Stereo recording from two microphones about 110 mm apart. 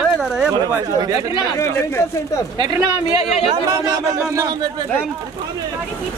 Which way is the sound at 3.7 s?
30° right (ahead or behind).